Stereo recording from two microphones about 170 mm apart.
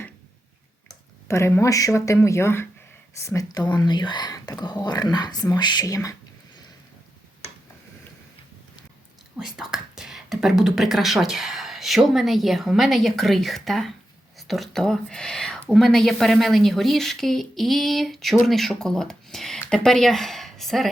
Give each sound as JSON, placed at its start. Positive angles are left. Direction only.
{"t": 1.3, "sound": "speech", "side_deg": 15}
{"t": 9.4, "sound": "speech", "side_deg": 0}